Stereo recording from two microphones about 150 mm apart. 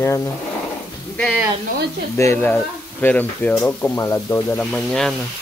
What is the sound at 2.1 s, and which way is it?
Speech, 15° left (ahead or behind).